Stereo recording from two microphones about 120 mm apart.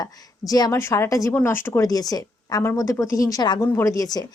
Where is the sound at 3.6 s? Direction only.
20° left (ahead or behind).